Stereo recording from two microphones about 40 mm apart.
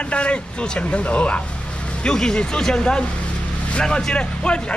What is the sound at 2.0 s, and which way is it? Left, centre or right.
Speech, centre.